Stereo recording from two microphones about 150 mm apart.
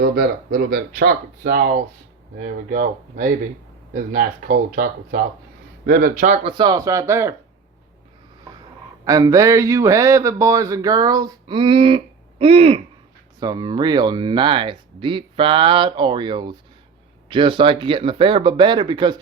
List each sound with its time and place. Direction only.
0.7 s speech: 85° right
2.4 s speech: 70° right (ahead or behind)
6.4 s speech: 30° right (ahead or behind)
9.0 s speech: 25° right (ahead or behind)